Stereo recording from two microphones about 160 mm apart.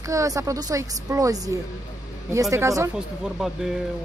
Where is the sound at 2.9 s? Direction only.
5° right (ahead or behind).